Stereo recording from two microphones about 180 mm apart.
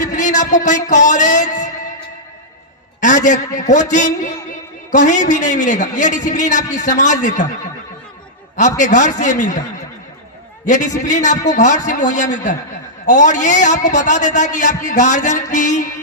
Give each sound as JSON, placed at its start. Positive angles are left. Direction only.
{"t": 0.0, "sound": "speech", "side_deg": 45}
{"t": 3.0, "sound": "a man's voice", "side_deg": 45}
{"t": 8.8, "sound": "a man's voice", "side_deg": 45}
{"t": 10.7, "sound": "a man's voice", "side_deg": 45}